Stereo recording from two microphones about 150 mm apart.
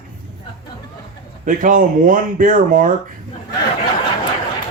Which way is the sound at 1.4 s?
60° right (ahead or behind).